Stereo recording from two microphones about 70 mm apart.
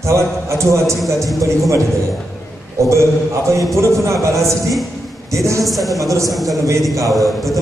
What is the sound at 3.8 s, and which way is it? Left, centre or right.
Speech, right.